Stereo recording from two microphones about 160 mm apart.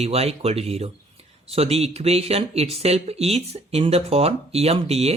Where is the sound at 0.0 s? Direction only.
40° right (ahead or behind).